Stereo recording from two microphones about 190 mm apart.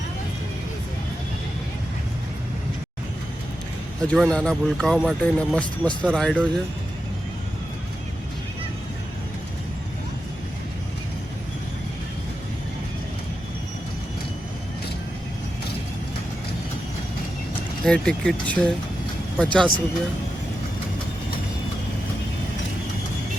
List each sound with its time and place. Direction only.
4.1 s speech: 5° left (ahead or behind)
17.8 s speech: 5° left (ahead or behind)